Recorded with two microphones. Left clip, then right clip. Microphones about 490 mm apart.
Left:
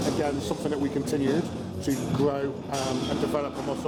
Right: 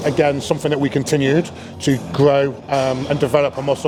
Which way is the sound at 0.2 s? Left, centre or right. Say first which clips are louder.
Right 11 dB; right.